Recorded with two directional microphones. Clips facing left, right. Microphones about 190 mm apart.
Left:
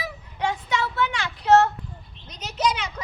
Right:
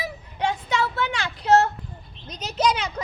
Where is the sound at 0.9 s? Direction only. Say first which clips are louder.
Left 1 dB; 30° right (ahead or behind).